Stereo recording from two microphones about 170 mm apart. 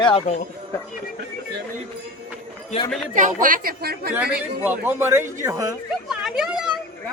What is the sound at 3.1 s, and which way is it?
A woman's voice, 50° right (ahead or behind).